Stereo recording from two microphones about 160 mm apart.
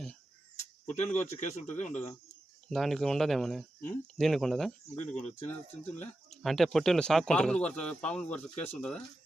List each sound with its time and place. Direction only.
0.9 s speech: 45° left (ahead or behind)
2.6 s speech: centre (ahead or behind)